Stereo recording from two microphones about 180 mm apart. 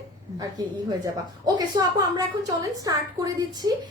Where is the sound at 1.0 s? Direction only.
20° right (ahead or behind).